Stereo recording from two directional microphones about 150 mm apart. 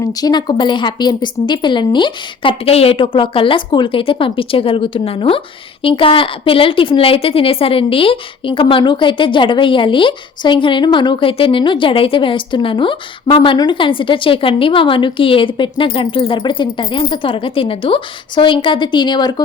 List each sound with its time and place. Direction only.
0.0 s a woman's voice: 25° left (ahead or behind)